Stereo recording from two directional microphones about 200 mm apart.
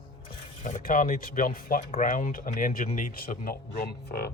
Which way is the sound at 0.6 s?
40° left (ahead or behind).